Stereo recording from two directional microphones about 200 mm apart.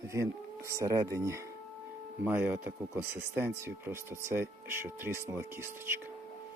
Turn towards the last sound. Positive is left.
turn(degrees=-10)  # may be behind; listen again after turning